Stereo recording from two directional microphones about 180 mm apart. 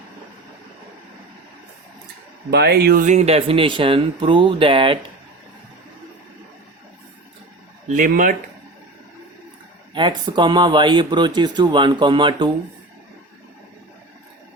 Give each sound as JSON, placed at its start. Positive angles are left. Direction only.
{"t": 2.5, "sound": "speech", "side_deg": -65}
{"t": 7.9, "sound": "speech", "side_deg": -50}
{"t": 9.9, "sound": "speech", "side_deg": -25}